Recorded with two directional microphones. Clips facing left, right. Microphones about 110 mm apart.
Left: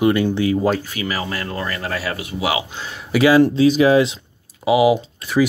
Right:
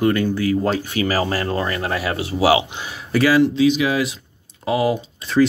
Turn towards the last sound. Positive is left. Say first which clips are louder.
# left 2 dB
turn(degrees=15)  # may be behind; listen again after turning